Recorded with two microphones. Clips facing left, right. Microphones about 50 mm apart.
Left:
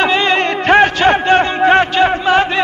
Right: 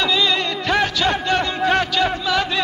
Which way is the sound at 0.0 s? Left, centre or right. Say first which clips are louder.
Left 6 dB; left.